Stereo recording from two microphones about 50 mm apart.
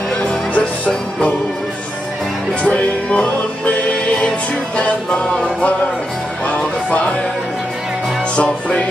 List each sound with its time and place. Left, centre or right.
0.6 s music: left
2.6 s music: left
8.4 s music: left